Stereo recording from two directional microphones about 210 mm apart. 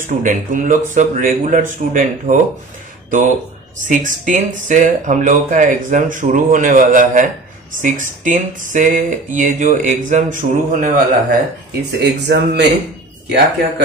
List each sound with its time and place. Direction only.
0.0 s speech: 40° right (ahead or behind)
11.9 s speech: 50° right (ahead or behind)